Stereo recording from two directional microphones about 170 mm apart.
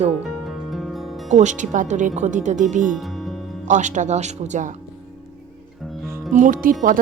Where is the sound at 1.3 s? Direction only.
45° right (ahead or behind).